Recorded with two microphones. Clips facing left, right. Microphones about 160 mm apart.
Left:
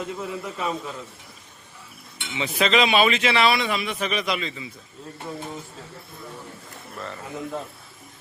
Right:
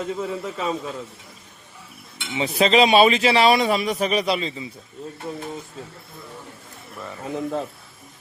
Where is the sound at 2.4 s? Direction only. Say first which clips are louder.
Right 4 dB; 35° right (ahead or behind).